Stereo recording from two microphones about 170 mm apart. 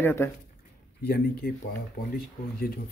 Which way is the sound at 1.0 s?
70° left (ahead or behind).